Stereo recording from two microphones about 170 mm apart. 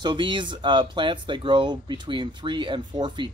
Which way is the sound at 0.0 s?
30° right (ahead or behind).